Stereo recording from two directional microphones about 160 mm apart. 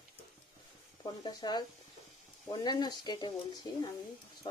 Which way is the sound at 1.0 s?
25° left (ahead or behind).